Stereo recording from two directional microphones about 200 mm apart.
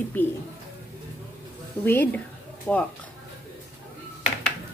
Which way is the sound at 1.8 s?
10° left (ahead or behind).